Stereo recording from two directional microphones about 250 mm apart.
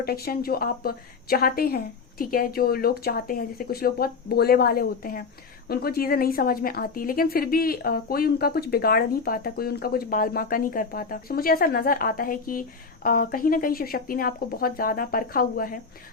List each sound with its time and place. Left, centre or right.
0.0 s a woman's voice: left